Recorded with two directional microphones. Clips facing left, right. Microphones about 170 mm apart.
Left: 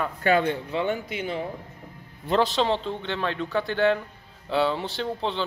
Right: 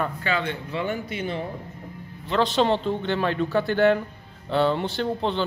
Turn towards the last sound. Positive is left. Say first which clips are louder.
# right 3 dB
turn(degrees=0)  # may be behind; listen again after turning